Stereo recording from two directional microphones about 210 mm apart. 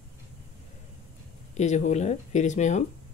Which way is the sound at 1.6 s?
35° left (ahead or behind).